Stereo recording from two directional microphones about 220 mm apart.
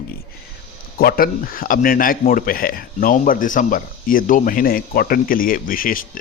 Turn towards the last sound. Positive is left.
turn(degrees=40)  # may be behind; listen again after turning